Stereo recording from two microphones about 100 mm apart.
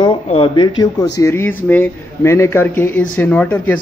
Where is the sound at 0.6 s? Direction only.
45° left (ahead or behind).